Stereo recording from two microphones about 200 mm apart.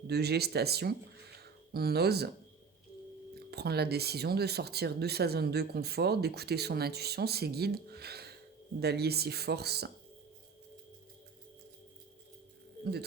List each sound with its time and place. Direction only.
0.1 s speech: 55° right (ahead or behind)
3.5 s speech: 55° right (ahead or behind)
12.8 s music: 55° right (ahead or behind)